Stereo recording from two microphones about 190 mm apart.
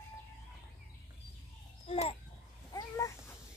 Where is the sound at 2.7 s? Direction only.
20° left (ahead or behind).